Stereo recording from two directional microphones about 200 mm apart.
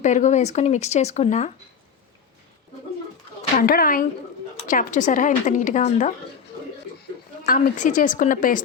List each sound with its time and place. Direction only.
0.0 s speech: 35° left (ahead or behind)
3.6 s a woman's voice: 45° left (ahead or behind)
7.4 s speech: 45° left (ahead or behind)